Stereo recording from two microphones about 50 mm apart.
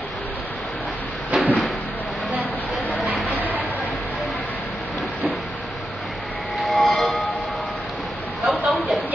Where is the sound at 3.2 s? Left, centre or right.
Left.